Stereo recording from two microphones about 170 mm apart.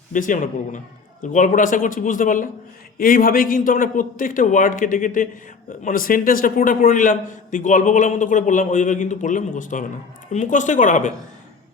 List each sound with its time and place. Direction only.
0.1 s a man's voice: 50° left (ahead or behind)